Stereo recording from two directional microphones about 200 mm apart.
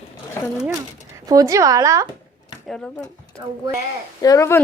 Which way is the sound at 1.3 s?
15° right (ahead or behind).